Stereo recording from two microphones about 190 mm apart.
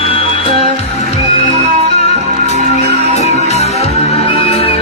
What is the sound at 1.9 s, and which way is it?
Music, 35° left (ahead or behind).